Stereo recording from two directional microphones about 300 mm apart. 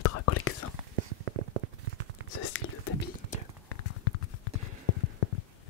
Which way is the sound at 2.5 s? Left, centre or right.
Left.